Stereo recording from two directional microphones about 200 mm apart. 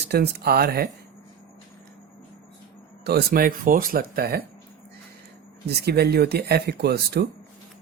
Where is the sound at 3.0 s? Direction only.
55° right (ahead or behind).